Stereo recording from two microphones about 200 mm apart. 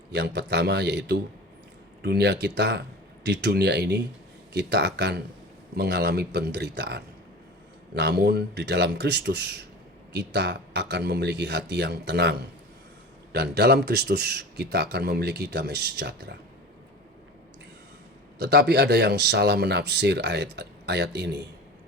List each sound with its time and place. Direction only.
0.1 s speech: 60° right (ahead or behind)
18.3 s speech: 55° right (ahead or behind)